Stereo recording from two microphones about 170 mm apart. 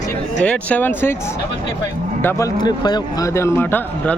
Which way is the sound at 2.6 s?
25° left (ahead or behind).